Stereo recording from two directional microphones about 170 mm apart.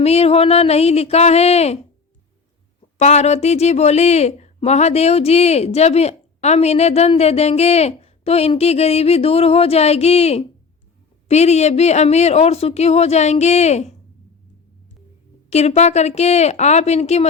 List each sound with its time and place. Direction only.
0.0 s a woman's voice: 35° left (ahead or behind)
3.0 s a woman's voice: 40° left (ahead or behind)
15.4 s a woman's voice: 40° left (ahead or behind)